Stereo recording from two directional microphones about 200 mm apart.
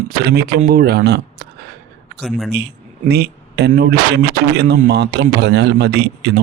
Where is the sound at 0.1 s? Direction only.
50° right (ahead or behind).